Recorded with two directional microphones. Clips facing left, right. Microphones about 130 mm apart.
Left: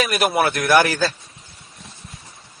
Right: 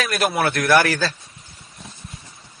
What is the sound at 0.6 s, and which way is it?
Speech, 20° left (ahead or behind).